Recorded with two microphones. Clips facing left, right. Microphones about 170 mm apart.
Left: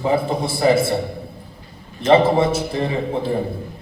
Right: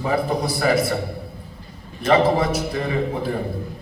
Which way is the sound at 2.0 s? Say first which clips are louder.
Left 3 dB; 25° left (ahead or behind).